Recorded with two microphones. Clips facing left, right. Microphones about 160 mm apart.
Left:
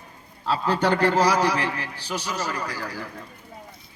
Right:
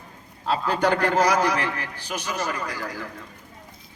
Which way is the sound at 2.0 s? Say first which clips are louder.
Right 1 dB; 20° right (ahead or behind).